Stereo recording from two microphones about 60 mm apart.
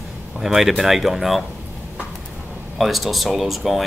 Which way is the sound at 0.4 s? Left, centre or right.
Centre.